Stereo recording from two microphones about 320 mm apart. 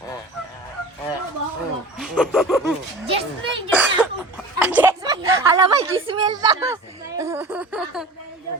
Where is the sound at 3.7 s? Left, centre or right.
Centre.